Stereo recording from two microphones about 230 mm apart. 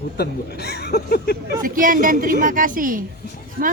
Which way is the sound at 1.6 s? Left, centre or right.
Right.